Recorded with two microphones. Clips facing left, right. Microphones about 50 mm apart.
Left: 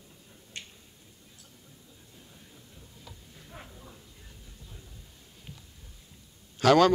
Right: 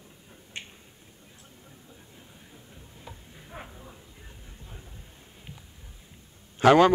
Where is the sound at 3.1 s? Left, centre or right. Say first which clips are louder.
Right 5 dB; right.